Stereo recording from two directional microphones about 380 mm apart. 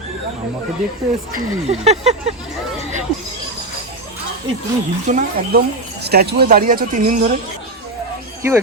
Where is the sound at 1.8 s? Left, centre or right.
Centre.